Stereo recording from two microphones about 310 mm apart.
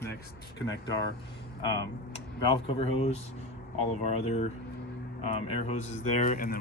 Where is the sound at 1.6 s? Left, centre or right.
Centre.